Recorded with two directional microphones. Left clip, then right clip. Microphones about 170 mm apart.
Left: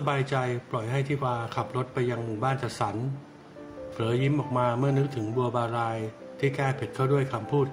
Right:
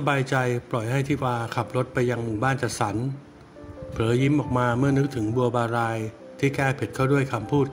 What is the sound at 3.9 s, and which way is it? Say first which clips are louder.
A man's voice: right 5 dB; 35° right (ahead or behind).